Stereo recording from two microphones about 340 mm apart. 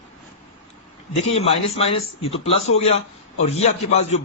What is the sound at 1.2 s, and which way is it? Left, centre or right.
A man's voice, centre.